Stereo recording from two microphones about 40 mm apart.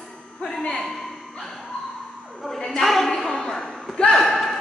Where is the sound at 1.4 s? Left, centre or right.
Centre.